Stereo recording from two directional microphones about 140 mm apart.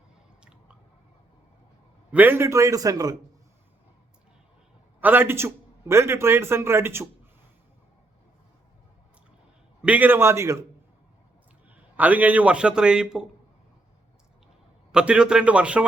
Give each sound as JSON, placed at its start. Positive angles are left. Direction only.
{"t": 2.1, "sound": "a man's voice", "side_deg": -15}
{"t": 4.9, "sound": "a man's voice", "side_deg": -15}
{"t": 9.8, "sound": "speech", "side_deg": -10}
{"t": 11.7, "sound": "a man's voice", "side_deg": -10}
{"t": 14.9, "sound": "speech", "side_deg": -5}